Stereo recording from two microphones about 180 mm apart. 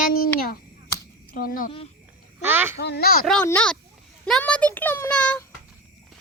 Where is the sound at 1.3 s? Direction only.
55° left (ahead or behind).